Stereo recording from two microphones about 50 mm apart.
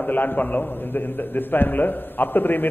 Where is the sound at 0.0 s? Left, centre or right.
Left.